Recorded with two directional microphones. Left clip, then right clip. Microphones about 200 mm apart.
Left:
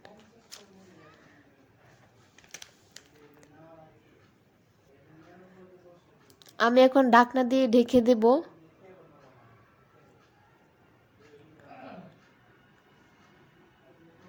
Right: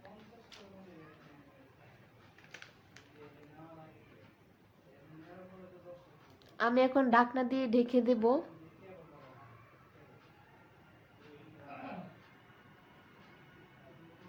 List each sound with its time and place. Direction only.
2.5 s typing: 40° left (ahead or behind)
6.4 s a woman's voice: 40° left (ahead or behind)